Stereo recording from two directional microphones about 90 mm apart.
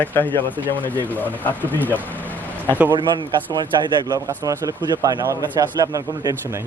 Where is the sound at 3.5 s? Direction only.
50° right (ahead or behind).